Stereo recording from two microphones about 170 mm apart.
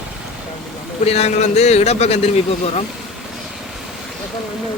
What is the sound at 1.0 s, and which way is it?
A man's voice, 40° left (ahead or behind).